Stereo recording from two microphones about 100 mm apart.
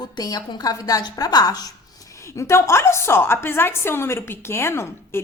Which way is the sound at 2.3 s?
30° left (ahead or behind).